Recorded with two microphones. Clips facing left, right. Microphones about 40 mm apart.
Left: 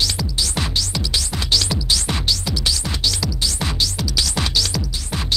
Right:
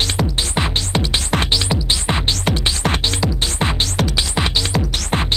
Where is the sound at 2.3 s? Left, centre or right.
Right.